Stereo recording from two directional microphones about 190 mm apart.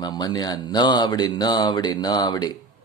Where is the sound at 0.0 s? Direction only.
20° left (ahead or behind).